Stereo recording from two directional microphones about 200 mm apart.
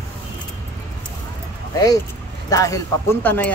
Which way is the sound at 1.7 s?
15° left (ahead or behind).